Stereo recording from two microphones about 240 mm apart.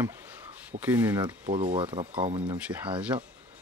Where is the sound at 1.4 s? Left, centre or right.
Right.